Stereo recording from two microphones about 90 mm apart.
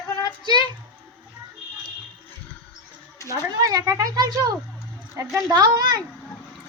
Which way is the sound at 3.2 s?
40° right (ahead or behind).